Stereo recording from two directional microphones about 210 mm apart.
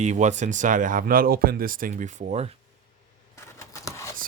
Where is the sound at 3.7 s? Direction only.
15° left (ahead or behind).